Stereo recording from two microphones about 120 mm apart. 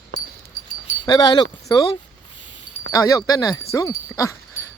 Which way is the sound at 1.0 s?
35° left (ahead or behind).